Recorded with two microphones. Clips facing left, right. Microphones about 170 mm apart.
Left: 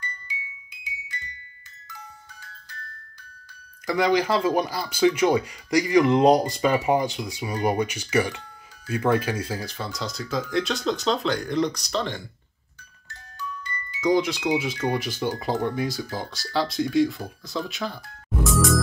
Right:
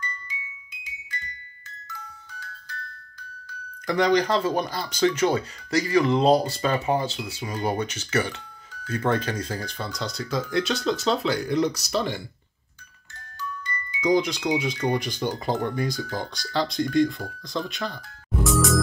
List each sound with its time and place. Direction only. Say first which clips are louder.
3.8 s speech: right 1 dB; 5° left (ahead or behind)
13.9 s speech: even; 5° left (ahead or behind)
18.4 s music: even; centre (ahead or behind)